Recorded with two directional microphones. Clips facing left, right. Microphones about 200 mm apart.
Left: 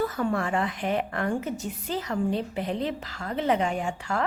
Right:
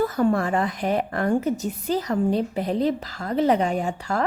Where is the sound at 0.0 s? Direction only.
40° right (ahead or behind).